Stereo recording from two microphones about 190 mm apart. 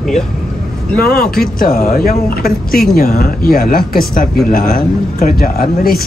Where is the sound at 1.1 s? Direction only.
50° left (ahead or behind).